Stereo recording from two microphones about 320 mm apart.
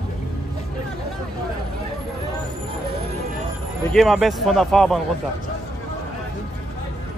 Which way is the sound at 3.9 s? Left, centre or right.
Centre.